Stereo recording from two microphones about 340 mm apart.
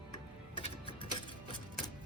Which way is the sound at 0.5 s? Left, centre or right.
Centre.